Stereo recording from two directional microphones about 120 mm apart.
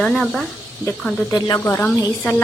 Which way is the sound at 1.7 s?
20° left (ahead or behind).